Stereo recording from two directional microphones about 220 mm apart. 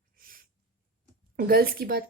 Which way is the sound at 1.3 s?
40° right (ahead or behind).